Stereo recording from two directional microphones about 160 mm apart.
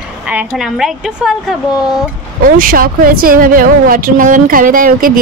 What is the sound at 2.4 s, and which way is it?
A woman's voice, 60° right (ahead or behind).